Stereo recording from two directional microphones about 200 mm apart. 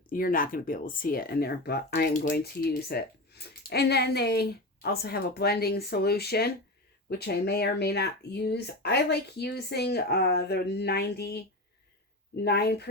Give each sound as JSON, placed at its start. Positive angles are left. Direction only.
{"t": 0.1, "sound": "speech", "side_deg": 45}